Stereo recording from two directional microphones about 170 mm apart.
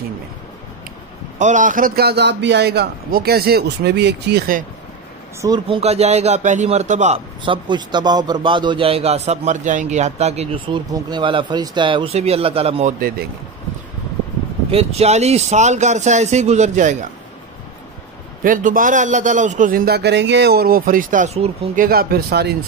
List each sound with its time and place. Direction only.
1.4 s a man's voice: 50° right (ahead or behind); by 4.6 s 65° right (ahead or behind)
5.4 s speech: 25° right (ahead or behind)
5.8 s a man's voice: 40° right (ahead or behind)
7.4 s a man's voice: 30° right (ahead or behind)
14.7 s a man's voice: 35° right (ahead or behind)
18.4 s a man's voice: 55° right (ahead or behind)
21.8 s speech: 65° right (ahead or behind)